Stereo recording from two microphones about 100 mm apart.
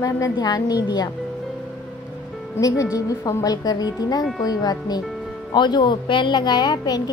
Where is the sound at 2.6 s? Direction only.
35° left (ahead or behind).